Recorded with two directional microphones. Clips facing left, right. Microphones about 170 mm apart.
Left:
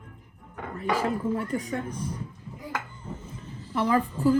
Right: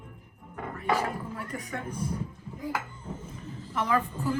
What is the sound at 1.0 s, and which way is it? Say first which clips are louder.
Speech: left 6 dB; 30° left (ahead or behind).